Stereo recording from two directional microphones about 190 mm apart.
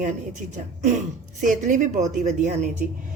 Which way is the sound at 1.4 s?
40° right (ahead or behind).